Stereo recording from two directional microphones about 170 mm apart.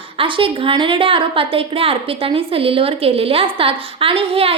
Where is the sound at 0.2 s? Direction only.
30° right (ahead or behind).